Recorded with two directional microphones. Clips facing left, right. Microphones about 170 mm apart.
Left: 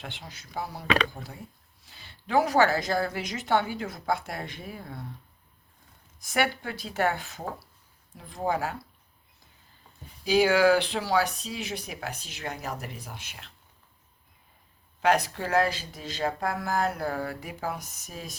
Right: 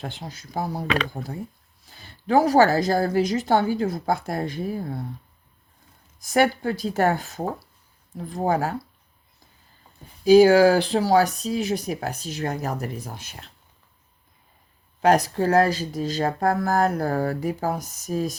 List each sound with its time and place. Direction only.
0.0 s speech: 40° right (ahead or behind)
6.1 s speech: 40° right (ahead or behind)
10.2 s speech: 40° right (ahead or behind)
15.0 s speech: 40° right (ahead or behind)